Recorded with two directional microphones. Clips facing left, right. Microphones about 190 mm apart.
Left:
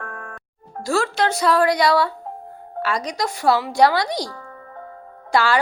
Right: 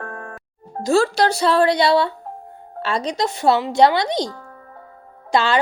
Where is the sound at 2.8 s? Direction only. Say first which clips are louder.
Right 2 dB; 25° right (ahead or behind).